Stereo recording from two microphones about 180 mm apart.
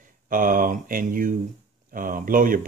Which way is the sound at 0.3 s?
50° right (ahead or behind).